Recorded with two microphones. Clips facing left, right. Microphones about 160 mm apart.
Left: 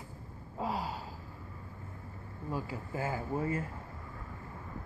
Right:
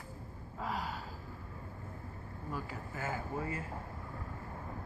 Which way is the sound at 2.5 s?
30° left (ahead or behind).